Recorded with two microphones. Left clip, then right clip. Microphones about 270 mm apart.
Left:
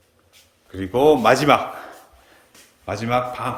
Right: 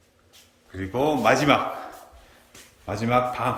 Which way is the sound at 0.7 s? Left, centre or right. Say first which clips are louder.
Left 8 dB; left.